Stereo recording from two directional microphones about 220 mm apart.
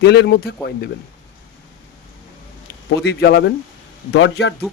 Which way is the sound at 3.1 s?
50° left (ahead or behind).